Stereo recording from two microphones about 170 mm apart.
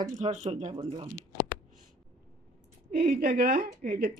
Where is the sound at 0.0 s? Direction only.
45° right (ahead or behind).